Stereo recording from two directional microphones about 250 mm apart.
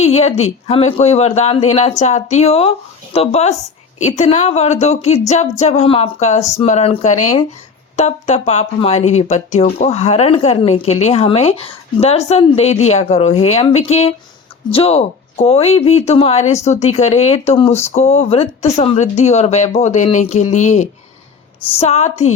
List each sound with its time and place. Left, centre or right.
0.0 s a woman's voice: left